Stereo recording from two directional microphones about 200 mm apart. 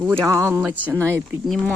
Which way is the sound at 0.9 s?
15° right (ahead or behind).